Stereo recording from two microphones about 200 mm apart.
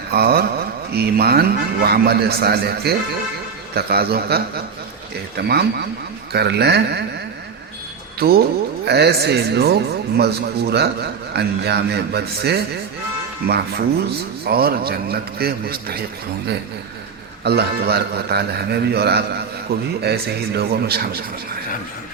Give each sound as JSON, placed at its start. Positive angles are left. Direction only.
{"t": 0.1, "sound": "a man's voice", "side_deg": -50}
{"t": 8.2, "sound": "a man's voice", "side_deg": -50}
{"t": 17.4, "sound": "a man's voice", "side_deg": -55}